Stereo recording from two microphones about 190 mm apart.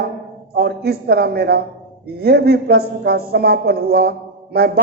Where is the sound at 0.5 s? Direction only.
55° right (ahead or behind).